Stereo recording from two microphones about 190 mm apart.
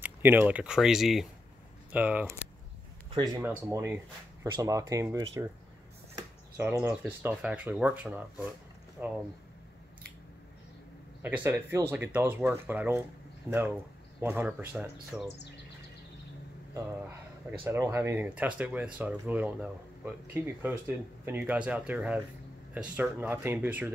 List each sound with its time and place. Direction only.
0.0 s speech: 10° right (ahead or behind)
3.1 s speech: 25° right (ahead or behind)
3.4 s speech: 10° right (ahead or behind)
6.1 s a sound: 15° right (ahead or behind)
7.0 s speech: 5° right (ahead or behind)
11.2 s speech: 10° right (ahead or behind)
14.2 s speech: 10° right (ahead or behind)
17.6 s speech: 10° right (ahead or behind)